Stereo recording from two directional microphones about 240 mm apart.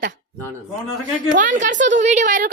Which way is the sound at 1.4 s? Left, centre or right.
Right.